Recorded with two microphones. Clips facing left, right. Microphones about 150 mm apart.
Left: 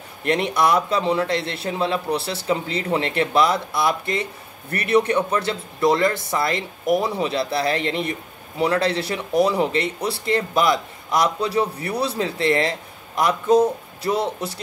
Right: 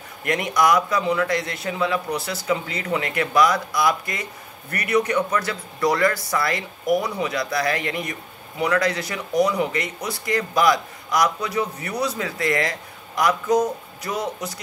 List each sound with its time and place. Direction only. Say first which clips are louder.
0.2 s a man's voice: left 1 dB; 30° left (ahead or behind)